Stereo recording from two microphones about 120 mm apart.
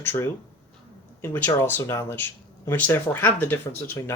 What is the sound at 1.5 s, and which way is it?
Speech, 20° left (ahead or behind).